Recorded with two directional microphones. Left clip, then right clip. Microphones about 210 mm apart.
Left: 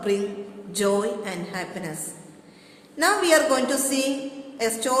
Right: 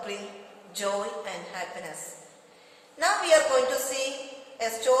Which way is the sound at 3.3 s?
50° left (ahead or behind).